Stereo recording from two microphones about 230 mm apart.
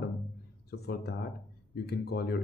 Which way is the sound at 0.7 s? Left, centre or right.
Left.